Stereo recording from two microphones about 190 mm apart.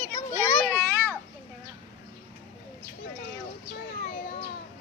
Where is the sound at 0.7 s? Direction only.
10° left (ahead or behind).